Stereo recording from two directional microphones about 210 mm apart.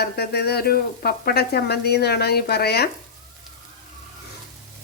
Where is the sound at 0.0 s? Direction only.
50° left (ahead or behind).